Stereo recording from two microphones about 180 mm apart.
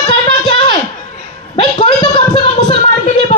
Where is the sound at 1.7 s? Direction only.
30° left (ahead or behind).